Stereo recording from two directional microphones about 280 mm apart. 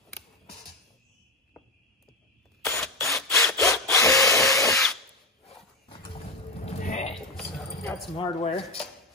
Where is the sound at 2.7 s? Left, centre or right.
Centre.